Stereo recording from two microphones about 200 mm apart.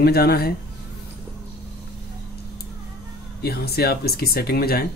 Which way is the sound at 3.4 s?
50° left (ahead or behind).